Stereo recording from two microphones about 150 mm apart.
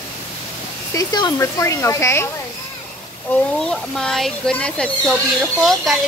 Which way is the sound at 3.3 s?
5° left (ahead or behind).